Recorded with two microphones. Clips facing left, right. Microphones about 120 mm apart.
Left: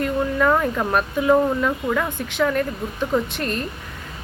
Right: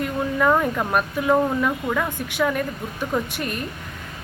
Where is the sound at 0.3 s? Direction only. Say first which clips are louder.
Right 1 dB; 5° right (ahead or behind).